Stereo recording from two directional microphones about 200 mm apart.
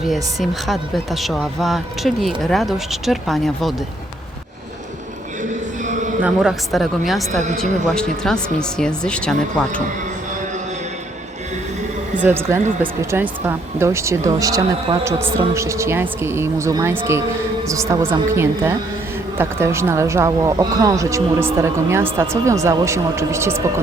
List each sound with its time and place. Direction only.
0.1 s a woman's voice: centre (ahead or behind)
5.8 s a sound: 40° right (ahead or behind)
6.2 s a woman's voice: 5° right (ahead or behind)
12.2 s speech: 10° right (ahead or behind)